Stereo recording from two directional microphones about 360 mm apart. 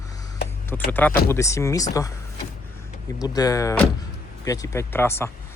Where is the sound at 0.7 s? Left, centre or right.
Centre.